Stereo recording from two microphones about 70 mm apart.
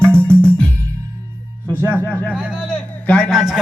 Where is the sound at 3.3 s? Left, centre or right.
Centre.